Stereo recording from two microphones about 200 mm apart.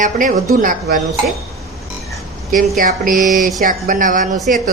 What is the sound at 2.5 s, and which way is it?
Speech, 45° right (ahead or behind).